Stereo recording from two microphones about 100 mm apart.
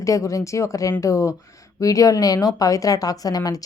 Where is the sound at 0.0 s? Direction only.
30° left (ahead or behind).